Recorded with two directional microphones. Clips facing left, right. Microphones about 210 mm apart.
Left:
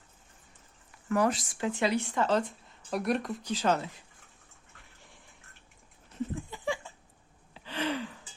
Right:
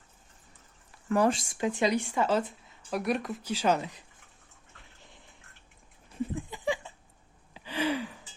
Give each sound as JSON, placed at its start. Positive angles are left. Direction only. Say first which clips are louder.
{"t": 1.1, "sound": "speech", "louder": "right 2 dB", "side_deg": -30}
{"t": 6.1, "sound": "a sound", "louder": "right 1 dB", "side_deg": -15}
{"t": 7.5, "sound": "gasp", "louder": "right 3 dB", "side_deg": -10}